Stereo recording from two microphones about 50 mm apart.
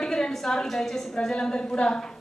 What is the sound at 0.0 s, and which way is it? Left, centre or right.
A woman's voice, centre.